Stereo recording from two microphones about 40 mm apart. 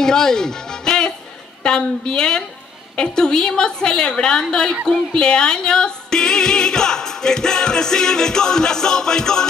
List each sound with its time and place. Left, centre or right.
0.0 s music: centre
1.6 s a woman's voice: left